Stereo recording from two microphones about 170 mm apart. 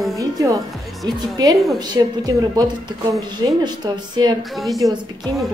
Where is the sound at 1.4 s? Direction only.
20° right (ahead or behind).